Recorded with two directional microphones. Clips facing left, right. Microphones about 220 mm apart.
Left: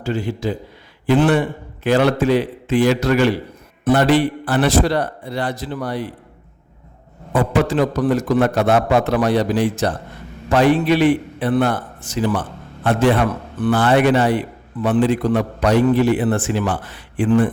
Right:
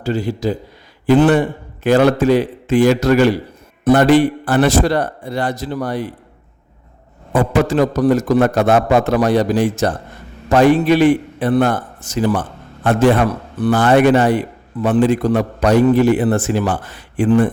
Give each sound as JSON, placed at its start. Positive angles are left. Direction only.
{"t": 0.0, "sound": "a man's voice", "side_deg": -35}
{"t": 7.3, "sound": "a man's voice", "side_deg": -45}